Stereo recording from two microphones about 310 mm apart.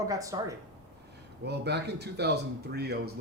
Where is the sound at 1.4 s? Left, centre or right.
Right.